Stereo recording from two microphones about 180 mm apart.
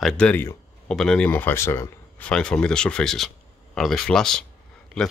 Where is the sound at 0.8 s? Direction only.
5° left (ahead or behind).